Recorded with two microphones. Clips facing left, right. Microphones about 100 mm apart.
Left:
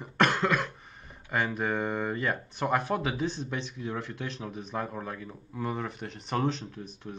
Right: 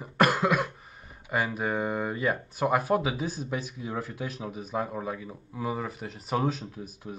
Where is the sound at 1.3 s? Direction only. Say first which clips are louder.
Right 1 dB; 5° right (ahead or behind).